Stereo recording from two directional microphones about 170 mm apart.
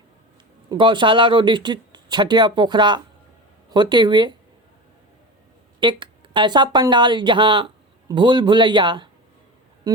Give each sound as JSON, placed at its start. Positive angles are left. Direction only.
{"t": 0.7, "sound": "speech", "side_deg": -30}
{"t": 5.8, "sound": "speech", "side_deg": -30}